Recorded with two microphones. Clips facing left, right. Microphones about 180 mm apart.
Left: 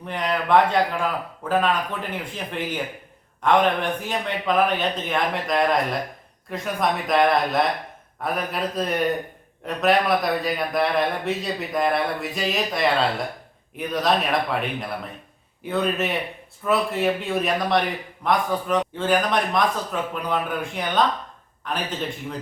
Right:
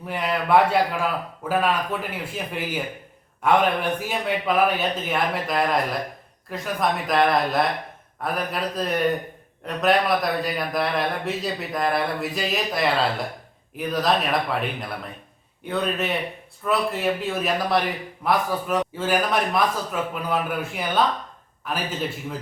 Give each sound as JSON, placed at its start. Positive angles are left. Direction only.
{"t": 0.0, "sound": "a man's voice", "side_deg": -5}